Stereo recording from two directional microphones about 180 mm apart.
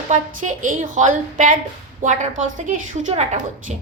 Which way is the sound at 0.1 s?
45° right (ahead or behind).